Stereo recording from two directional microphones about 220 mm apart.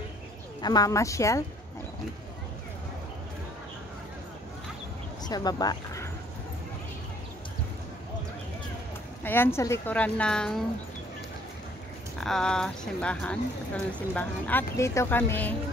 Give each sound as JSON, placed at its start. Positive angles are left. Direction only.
{"t": 0.6, "sound": "speech", "side_deg": 15}
{"t": 5.2, "sound": "speech", "side_deg": 15}
{"t": 9.2, "sound": "speech", "side_deg": 10}
{"t": 12.2, "sound": "a woman's voice", "side_deg": 0}